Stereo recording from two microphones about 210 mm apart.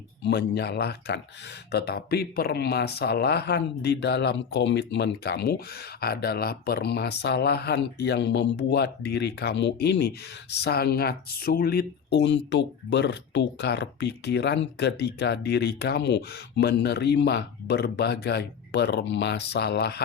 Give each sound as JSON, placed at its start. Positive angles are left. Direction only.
{"t": 0.2, "sound": "speech", "side_deg": 55}